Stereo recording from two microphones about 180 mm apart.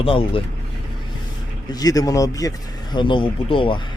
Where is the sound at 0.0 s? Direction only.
30° left (ahead or behind).